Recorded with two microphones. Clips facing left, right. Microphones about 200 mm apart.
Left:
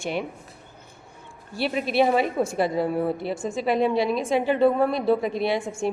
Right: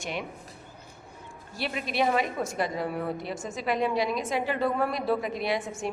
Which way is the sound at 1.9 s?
30° left (ahead or behind).